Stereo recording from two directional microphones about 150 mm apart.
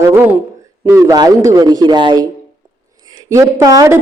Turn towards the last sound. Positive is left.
turn(degrees=-20)  # may be behind; listen again after turning